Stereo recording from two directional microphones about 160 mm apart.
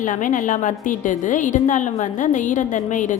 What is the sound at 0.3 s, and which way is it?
A woman's voice, 55° left (ahead or behind).